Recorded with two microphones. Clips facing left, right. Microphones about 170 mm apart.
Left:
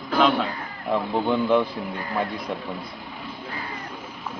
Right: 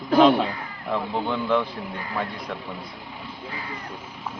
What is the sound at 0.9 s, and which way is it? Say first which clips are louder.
Speech: left 3 dB; 15° left (ahead or behind).